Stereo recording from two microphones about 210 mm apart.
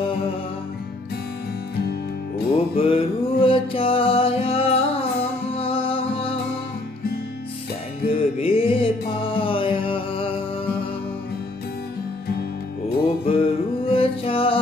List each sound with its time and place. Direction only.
2.5 s music: 25° left (ahead or behind)
8.1 s music: 25° left (ahead or behind)
13.2 s music: 25° left (ahead or behind)